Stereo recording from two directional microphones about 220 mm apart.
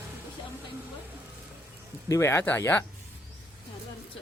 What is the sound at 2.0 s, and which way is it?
Speech, 15° left (ahead or behind).